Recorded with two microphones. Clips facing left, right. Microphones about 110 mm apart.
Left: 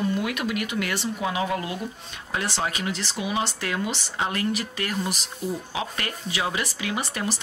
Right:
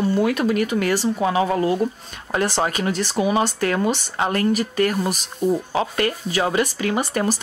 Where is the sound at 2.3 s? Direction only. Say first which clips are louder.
Right 7 dB; 50° right (ahead or behind).